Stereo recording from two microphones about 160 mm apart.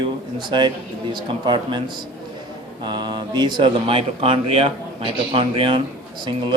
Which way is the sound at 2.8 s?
25° right (ahead or behind).